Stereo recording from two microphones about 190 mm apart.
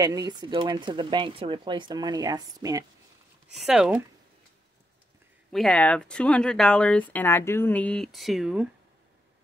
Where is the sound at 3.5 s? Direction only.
5° right (ahead or behind).